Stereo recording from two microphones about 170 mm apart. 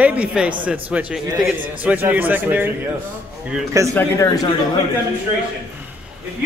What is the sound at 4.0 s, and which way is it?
Speech, 20° left (ahead or behind).